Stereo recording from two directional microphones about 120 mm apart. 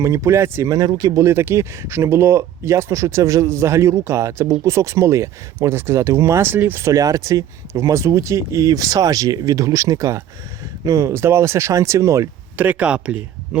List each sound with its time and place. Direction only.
0.0 s speech: 25° right (ahead or behind)
12.6 s speech: 10° right (ahead or behind)